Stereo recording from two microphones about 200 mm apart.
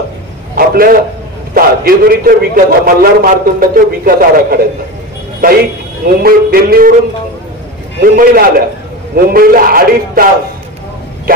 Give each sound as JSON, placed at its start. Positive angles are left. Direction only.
{"t": 0.6, "sound": "a sound", "side_deg": -45}
{"t": 1.5, "sound": "a man's voice", "side_deg": -45}
{"t": 8.0, "sound": "a man's voice", "side_deg": -45}
{"t": 11.3, "sound": "bow-wow", "side_deg": -45}